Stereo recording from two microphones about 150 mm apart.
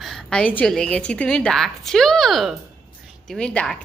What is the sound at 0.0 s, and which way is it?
A woman's voice, centre (ahead or behind).